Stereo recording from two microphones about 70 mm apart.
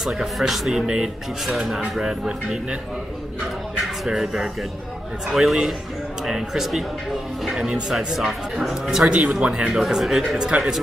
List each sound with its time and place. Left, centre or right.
0.0 s speech: centre
3.8 s speech: centre
9.1 s speech: centre